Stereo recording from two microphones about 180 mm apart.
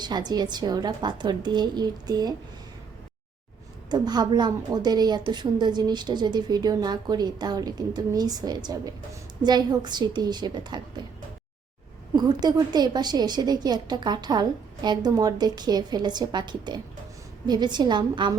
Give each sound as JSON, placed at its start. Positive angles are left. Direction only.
{"t": 0.0, "sound": "a woman's voice", "side_deg": -25}
{"t": 3.8, "sound": "a woman's voice", "side_deg": -20}
{"t": 12.1, "sound": "a woman's voice", "side_deg": -25}